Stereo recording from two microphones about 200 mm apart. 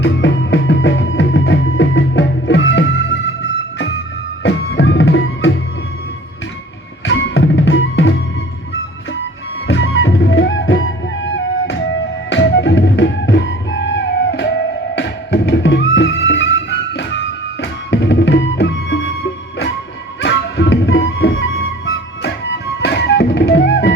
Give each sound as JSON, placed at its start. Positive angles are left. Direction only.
{"t": 0.0, "sound": "music", "side_deg": 60}
{"t": 7.0, "sound": "music", "side_deg": 65}
{"t": 9.6, "sound": "music", "side_deg": 70}
{"t": 20.2, "sound": "music", "side_deg": 65}